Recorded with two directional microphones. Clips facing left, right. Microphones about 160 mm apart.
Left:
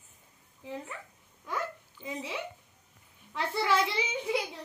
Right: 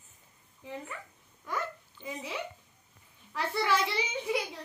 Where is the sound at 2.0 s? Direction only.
10° left (ahead or behind).